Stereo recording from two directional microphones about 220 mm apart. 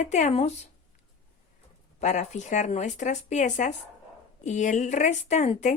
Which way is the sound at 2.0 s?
30° left (ahead or behind).